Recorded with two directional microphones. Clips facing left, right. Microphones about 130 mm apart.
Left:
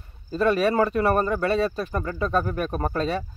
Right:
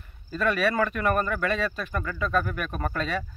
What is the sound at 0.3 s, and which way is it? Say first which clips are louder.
Speech: left 4 dB; 35° left (ahead or behind).